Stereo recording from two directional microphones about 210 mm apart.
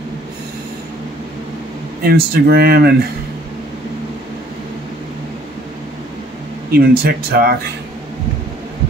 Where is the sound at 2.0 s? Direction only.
45° right (ahead or behind).